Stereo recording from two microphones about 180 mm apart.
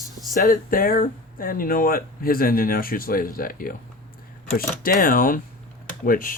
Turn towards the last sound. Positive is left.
turn(degrees=50)  # may be behind; listen again after turning